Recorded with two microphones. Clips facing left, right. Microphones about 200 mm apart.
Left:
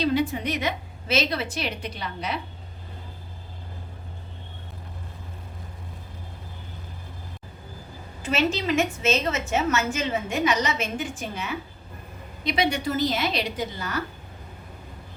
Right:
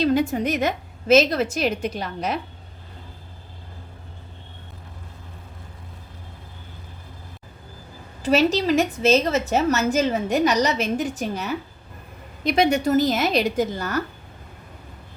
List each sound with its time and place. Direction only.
0.0 s a woman's voice: 45° right (ahead or behind)
8.2 s a woman's voice: 35° right (ahead or behind)